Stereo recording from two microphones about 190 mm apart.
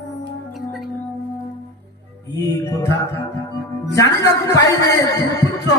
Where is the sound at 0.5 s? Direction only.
Centre (ahead or behind).